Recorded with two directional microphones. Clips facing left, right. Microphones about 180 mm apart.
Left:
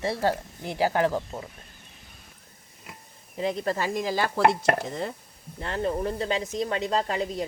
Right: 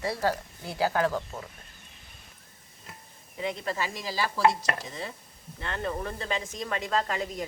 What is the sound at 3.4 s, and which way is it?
Speech, 35° left (ahead or behind).